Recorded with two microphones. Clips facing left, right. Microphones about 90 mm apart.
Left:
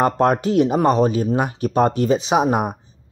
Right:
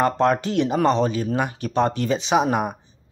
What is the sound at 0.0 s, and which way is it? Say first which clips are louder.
A man's voice: left 2 dB; 45° left (ahead or behind).